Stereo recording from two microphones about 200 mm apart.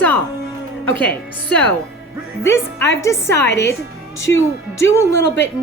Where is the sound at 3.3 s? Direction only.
55° left (ahead or behind).